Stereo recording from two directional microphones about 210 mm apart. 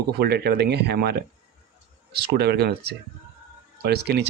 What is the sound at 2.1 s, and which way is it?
Speech, 50° right (ahead or behind).